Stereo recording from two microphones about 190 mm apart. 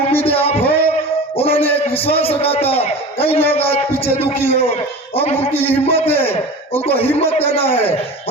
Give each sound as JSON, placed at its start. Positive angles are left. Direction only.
{"t": 0.3, "sound": "a sound", "side_deg": 30}
{"t": 1.4, "sound": "music", "side_deg": 30}
{"t": 1.7, "sound": "a man's voice", "side_deg": 30}